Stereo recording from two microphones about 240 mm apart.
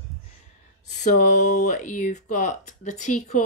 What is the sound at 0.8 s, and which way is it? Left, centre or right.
Speech, left.